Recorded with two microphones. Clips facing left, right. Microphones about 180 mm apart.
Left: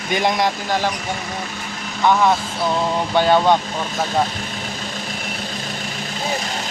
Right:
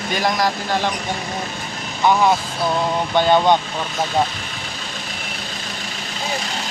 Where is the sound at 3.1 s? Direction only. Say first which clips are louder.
Even; 5° left (ahead or behind).